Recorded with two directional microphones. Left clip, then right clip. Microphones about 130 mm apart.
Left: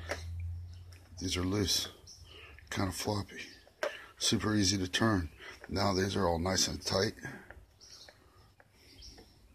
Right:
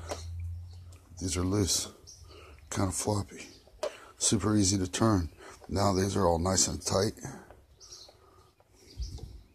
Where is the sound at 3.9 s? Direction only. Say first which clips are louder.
Right 3 dB; 30° right (ahead or behind).